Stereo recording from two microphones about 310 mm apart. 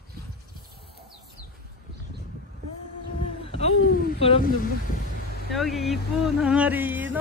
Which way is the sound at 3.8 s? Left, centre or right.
Left.